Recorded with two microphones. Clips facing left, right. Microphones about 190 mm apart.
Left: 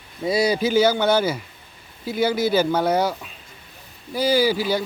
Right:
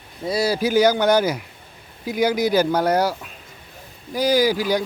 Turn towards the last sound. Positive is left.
turn(degrees=-10)  # may be behind; listen again after turning